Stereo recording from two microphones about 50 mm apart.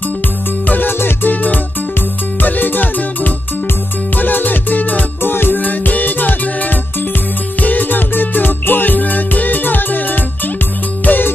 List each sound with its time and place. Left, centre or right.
0.7 s music: left